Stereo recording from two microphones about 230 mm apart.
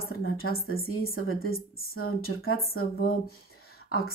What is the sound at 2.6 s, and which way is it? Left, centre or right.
Speech, left.